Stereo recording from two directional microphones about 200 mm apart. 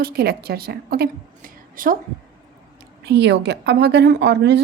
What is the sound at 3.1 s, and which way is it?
A woman's voice, 60° right (ahead or behind).